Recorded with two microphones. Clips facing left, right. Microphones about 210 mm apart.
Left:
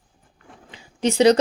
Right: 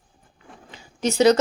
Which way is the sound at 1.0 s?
30° left (ahead or behind).